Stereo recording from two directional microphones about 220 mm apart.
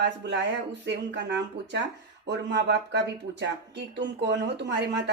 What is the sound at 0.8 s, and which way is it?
Speech, 55° right (ahead or behind).